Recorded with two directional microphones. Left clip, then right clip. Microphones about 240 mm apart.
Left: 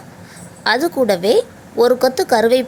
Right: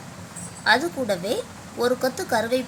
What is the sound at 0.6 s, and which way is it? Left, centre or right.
A woman's voice, left.